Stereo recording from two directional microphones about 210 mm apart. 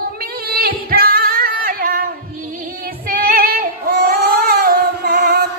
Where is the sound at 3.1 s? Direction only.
45° right (ahead or behind).